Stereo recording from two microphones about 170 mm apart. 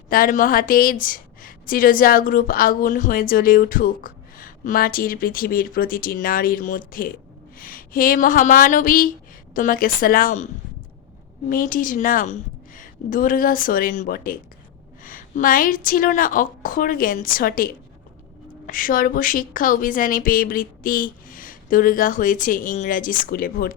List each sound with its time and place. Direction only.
0.1 s a woman's voice: 55° left (ahead or behind)